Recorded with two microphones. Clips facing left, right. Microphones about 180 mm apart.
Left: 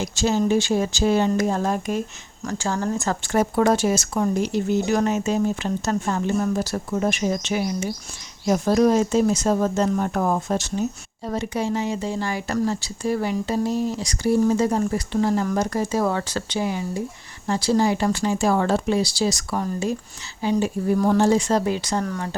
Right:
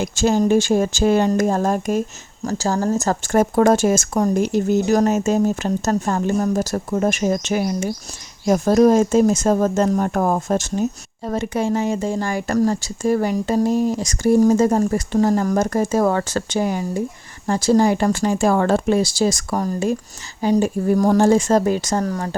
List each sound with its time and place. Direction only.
0.0 s a woman's voice: 50° right (ahead or behind)